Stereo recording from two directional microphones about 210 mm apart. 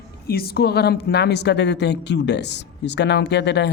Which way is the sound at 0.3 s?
45° left (ahead or behind).